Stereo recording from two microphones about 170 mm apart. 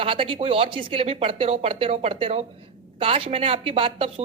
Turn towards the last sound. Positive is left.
turn(degrees=-30)  # may be behind; listen again after turning